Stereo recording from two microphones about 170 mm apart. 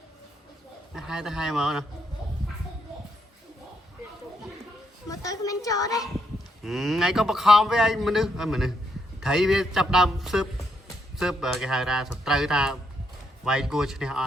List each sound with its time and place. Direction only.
0.9 s a man's voice: 5° right (ahead or behind)
5.0 s a woman's voice: 20° left (ahead or behind)
6.7 s a man's voice: centre (ahead or behind)